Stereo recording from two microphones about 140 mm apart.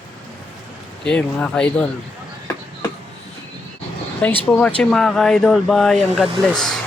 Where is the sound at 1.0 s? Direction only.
5° left (ahead or behind).